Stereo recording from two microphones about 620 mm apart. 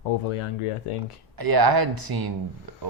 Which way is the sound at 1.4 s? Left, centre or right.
Right.